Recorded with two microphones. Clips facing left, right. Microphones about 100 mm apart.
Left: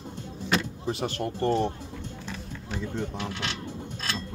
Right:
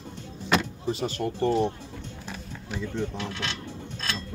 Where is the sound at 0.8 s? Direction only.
60° left (ahead or behind).